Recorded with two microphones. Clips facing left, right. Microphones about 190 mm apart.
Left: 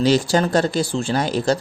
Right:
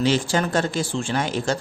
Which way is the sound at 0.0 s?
40° left (ahead or behind).